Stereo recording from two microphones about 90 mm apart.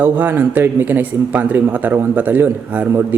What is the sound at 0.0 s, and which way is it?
Speech, 20° right (ahead or behind).